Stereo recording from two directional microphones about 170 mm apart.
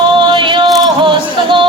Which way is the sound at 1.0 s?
30° right (ahead or behind).